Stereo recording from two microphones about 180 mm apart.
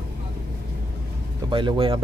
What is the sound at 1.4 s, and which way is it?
Speech, 25° right (ahead or behind).